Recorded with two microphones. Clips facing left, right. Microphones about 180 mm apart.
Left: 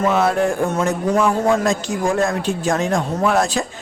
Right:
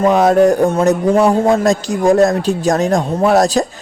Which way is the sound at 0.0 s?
40° right (ahead or behind).